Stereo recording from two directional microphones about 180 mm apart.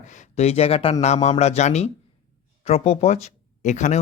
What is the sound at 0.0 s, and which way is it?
Speech, 45° left (ahead or behind).